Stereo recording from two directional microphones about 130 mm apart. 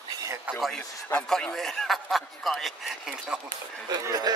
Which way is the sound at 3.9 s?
30° right (ahead or behind).